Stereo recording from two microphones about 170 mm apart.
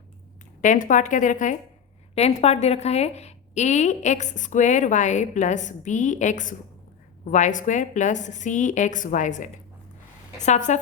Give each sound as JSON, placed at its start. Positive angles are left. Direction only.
{"t": 0.6, "sound": "a woman's voice", "side_deg": 50}
{"t": 10.4, "sound": "a woman's voice", "side_deg": 45}